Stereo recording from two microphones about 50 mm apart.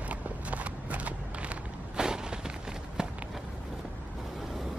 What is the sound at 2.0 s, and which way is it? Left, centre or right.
Walk, centre.